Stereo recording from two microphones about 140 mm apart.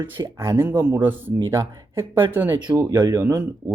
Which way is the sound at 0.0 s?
20° right (ahead or behind).